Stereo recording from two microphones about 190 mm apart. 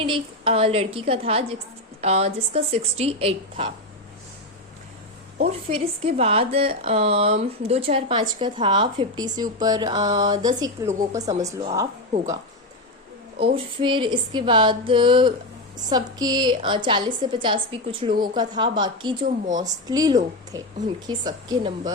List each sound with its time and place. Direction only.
0.0 s a woman's voice: 30° right (ahead or behind)
5.4 s a woman's voice: 30° right (ahead or behind); by 11.2 s 15° right (ahead or behind)
13.4 s a woman's voice: 25° right (ahead or behind)